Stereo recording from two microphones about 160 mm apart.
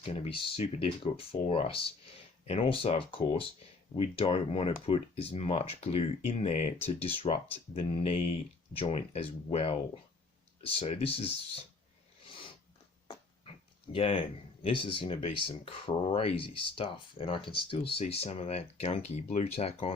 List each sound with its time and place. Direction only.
0.0 s speech: 40° left (ahead or behind)
13.9 s speech: 35° left (ahead or behind)